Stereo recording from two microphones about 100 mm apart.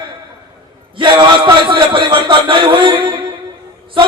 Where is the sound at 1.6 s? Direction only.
55° right (ahead or behind).